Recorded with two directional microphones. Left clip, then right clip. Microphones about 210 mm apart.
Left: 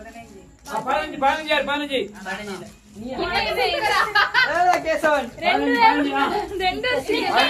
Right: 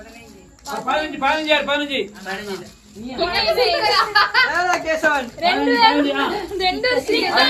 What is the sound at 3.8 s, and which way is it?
Speech, 15° left (ahead or behind).